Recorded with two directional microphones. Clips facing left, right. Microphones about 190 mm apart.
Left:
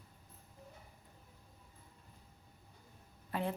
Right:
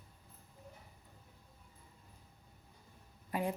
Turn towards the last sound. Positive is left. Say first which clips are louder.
# right 1 dB
turn(degrees=-10)  # may be behind; listen again after turning